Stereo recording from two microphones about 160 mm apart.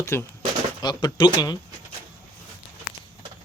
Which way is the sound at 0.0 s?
15° left (ahead or behind).